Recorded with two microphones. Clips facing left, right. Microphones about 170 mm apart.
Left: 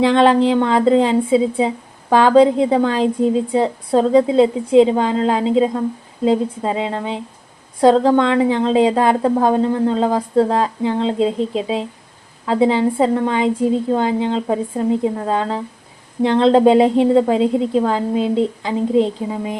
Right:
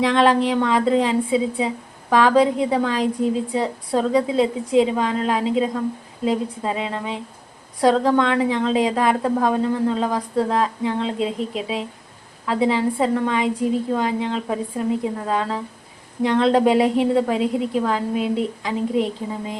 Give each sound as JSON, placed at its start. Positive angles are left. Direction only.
{"t": 0.0, "sound": "a woman's voice", "side_deg": 30}